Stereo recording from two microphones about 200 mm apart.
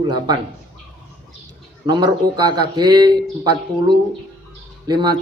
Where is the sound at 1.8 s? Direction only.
20° right (ahead or behind).